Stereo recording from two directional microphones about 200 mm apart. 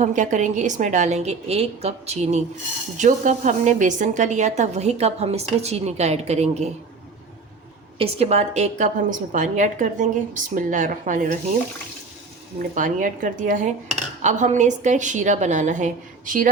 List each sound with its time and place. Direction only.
0.0 s a woman's voice: 40° right (ahead or behind)
7.9 s a woman's voice: 30° right (ahead or behind)
12.7 s a woman's voice: 40° right (ahead or behind)